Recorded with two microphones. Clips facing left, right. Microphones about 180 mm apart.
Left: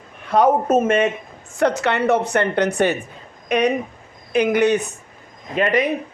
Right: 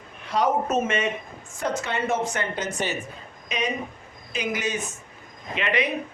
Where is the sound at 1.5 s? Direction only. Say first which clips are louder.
Left 9 dB; 70° left (ahead or behind).